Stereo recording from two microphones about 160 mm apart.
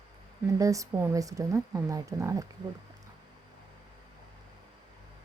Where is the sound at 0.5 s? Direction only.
20° right (ahead or behind).